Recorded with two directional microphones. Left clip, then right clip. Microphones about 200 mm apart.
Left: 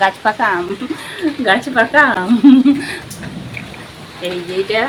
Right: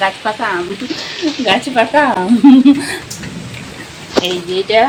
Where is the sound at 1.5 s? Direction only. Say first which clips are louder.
Even; 5° right (ahead or behind).